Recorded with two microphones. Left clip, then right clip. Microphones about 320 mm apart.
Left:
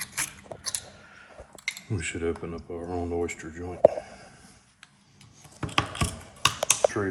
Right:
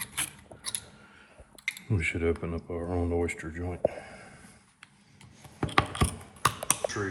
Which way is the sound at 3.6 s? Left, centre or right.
Right.